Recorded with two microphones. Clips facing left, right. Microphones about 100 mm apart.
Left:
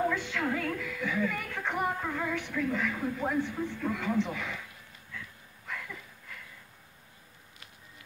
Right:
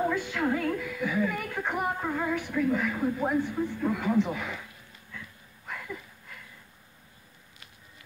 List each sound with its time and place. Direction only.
0.0 s a woman's voice: 10° right (ahead or behind)